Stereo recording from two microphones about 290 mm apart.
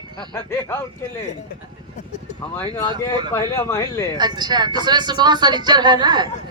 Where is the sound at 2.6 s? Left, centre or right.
Centre.